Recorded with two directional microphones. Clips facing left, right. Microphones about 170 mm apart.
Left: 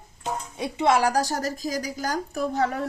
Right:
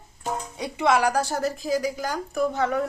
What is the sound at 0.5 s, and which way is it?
Speech, 25° left (ahead or behind).